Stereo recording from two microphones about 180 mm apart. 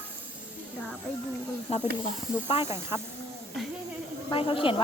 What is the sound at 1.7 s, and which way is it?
Speech, 35° left (ahead or behind).